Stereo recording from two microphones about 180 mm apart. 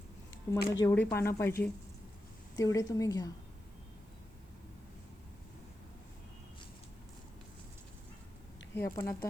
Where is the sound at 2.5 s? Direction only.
20° left (ahead or behind).